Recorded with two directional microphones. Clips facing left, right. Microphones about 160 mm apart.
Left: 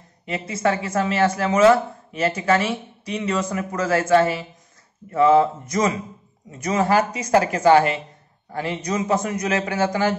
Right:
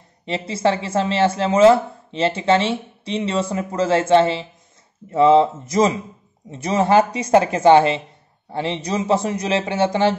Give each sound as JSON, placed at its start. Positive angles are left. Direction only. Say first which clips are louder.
{"t": 0.2, "sound": "speech", "louder": "right 3 dB", "side_deg": -30}